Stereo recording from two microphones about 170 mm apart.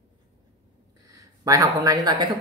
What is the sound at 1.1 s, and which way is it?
Speech, 20° right (ahead or behind).